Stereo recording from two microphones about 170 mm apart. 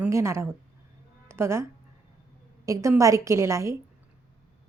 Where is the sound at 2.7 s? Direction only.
20° right (ahead or behind).